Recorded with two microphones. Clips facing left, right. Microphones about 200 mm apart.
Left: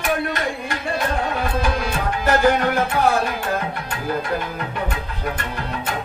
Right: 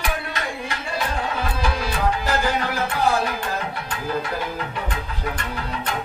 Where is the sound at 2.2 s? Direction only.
55° left (ahead or behind).